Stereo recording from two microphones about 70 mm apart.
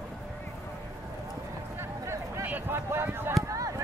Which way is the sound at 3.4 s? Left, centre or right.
Right.